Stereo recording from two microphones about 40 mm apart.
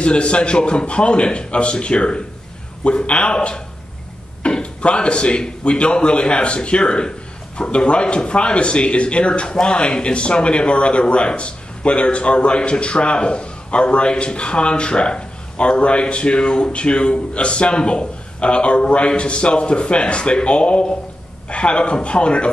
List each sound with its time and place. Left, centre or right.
0.0 s speech: left